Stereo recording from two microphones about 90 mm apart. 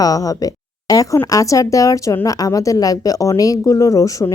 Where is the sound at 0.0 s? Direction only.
40° left (ahead or behind).